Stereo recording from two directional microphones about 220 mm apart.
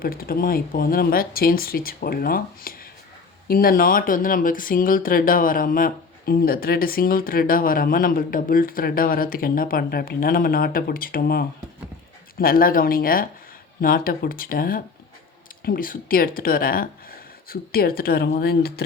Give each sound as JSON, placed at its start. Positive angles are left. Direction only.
{"t": 0.0, "sound": "speech", "side_deg": 40}